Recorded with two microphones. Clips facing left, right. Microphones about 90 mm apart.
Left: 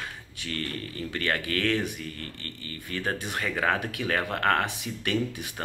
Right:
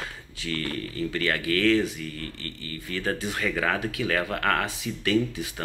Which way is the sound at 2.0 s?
35° left (ahead or behind).